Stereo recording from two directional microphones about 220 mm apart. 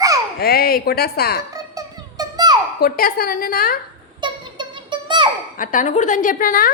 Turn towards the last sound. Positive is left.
turn(degrees=40)  # may be behind; listen again after turning